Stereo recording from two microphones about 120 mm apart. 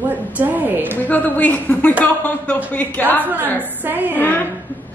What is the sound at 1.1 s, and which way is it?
Speech, 15° left (ahead or behind).